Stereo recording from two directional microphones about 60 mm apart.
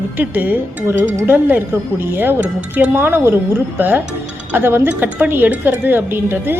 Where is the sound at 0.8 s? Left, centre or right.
Right.